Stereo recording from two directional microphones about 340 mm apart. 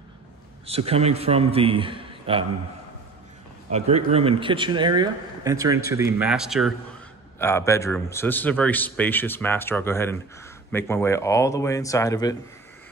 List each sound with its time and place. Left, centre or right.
0.7 s speech: centre
3.7 s a man's voice: centre